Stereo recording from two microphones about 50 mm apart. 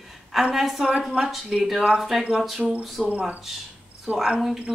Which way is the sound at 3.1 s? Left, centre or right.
Right.